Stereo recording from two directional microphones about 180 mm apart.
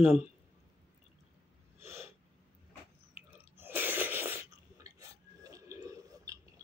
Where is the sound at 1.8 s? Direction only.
35° left (ahead or behind).